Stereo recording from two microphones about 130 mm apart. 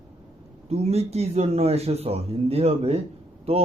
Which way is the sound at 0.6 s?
55° right (ahead or behind).